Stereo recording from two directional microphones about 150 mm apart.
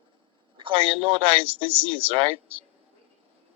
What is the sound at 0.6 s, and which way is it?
Speech, 35° right (ahead or behind).